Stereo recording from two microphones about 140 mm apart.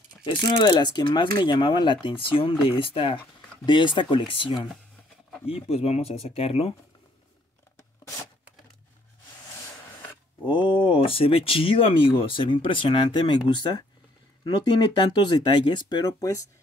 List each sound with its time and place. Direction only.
0.2 s speech: 30° left (ahead or behind)
10.4 s speech: 35° left (ahead or behind)
14.4 s speech: 30° left (ahead or behind)